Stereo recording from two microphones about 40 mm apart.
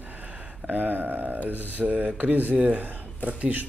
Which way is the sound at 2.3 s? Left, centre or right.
Right.